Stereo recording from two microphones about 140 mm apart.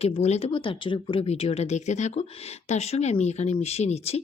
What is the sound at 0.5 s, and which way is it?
Speech, 40° left (ahead or behind).